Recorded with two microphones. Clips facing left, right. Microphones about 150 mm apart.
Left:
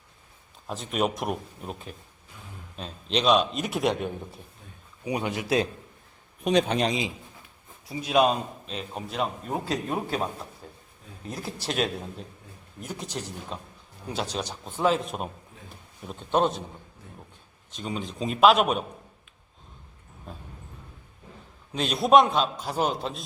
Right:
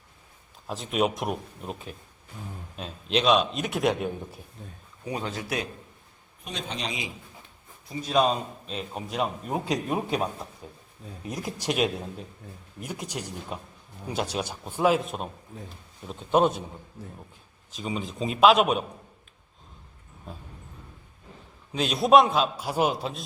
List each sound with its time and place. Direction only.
0.7 s a man's voice: centre (ahead or behind)
5.0 s a man's voice: 15° left (ahead or behind)
6.4 s a man's voice: 75° left (ahead or behind)
7.9 s a man's voice: 10° left (ahead or behind); by 16.6 s 5° right (ahead or behind)
17.7 s a man's voice: centre (ahead or behind)
20.3 s a man's voice: centre (ahead or behind)
21.7 s a man's voice: centre (ahead or behind)